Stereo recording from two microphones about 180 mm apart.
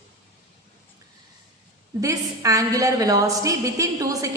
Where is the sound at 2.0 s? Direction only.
20° right (ahead or behind).